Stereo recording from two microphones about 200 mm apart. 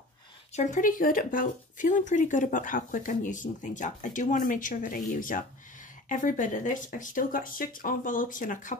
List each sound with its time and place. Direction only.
0.5 s speech: 35° left (ahead or behind)